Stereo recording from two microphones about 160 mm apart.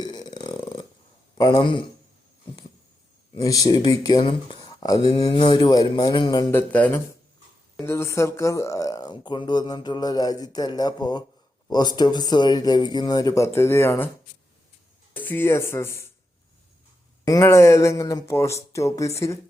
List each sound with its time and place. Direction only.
0.0 s a sound: 25° left (ahead or behind)
1.4 s speech: 25° left (ahead or behind)
3.3 s speech: 20° left (ahead or behind)
6.5 s speech: 10° left (ahead or behind)
15.1 s speech: 10° left (ahead or behind)
17.2 s speech: 20° left (ahead or behind)